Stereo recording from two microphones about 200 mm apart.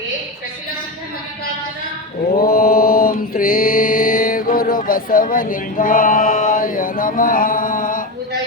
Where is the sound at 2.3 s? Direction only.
50° left (ahead or behind).